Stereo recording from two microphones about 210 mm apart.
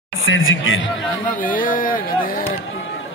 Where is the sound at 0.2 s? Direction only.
70° left (ahead or behind).